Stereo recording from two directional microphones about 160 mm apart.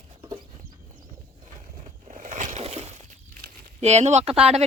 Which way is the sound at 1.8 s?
55° right (ahead or behind).